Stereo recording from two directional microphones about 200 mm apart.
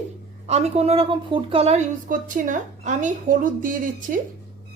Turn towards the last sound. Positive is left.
turn(degrees=-45)  # may be behind; listen again after turning